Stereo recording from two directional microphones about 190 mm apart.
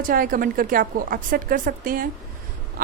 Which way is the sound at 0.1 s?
50° right (ahead or behind).